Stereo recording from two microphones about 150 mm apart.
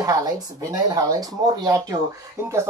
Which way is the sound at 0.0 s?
25° right (ahead or behind).